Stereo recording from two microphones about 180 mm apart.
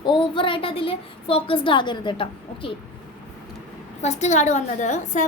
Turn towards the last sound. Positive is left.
turn(degrees=40)  # may be behind; listen again after turning